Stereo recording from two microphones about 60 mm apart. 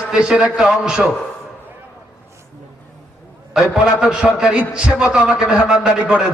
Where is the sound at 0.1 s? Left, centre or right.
Centre.